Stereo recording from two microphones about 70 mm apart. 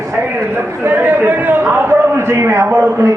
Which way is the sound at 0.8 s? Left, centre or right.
Right.